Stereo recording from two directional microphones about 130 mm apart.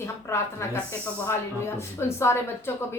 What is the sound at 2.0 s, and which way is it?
Speech, 20° left (ahead or behind).